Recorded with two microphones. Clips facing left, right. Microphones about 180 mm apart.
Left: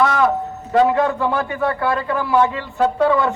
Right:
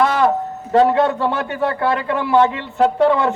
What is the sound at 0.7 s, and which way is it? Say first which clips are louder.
A man's voice: right 2 dB; 30° right (ahead or behind).